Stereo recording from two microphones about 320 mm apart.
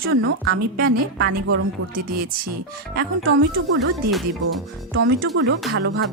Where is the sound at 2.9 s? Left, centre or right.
Right.